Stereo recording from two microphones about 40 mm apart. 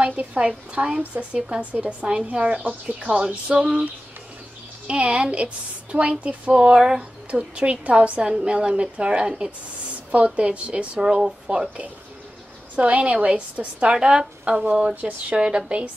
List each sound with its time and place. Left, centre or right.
0.0 s a woman's voice: right
1.6 s a woman's voice: right
4.8 s a woman's voice: right
7.2 s a woman's voice: right
8.2 s a woman's voice: centre
8.5 s a woman's voice: right
11.0 s a woman's voice: centre
12.7 s a woman's voice: right
15.0 s a woman's voice: right
15.3 s a woman's voice: right